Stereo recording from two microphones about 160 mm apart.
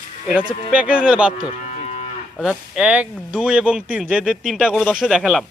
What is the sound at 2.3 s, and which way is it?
Speech, 5° right (ahead or behind).